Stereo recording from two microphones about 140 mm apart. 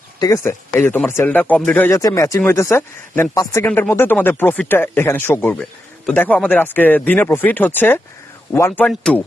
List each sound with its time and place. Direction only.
0.2 s speech: 20° left (ahead or behind); by 1.9 s 5° left (ahead or behind)
1.9 s speech: 25° left (ahead or behind)